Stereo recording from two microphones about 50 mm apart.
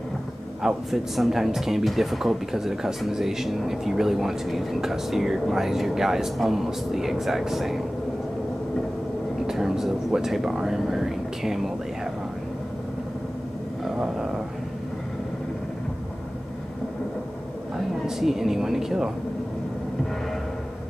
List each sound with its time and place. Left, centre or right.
0.6 s speech: centre
9.5 s speech: centre
13.9 s a sound: centre
18.0 s speech: centre